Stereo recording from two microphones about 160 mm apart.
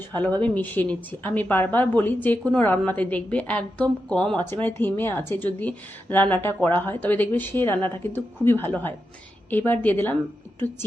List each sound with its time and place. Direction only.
0.1 s a woman's voice: 10° left (ahead or behind)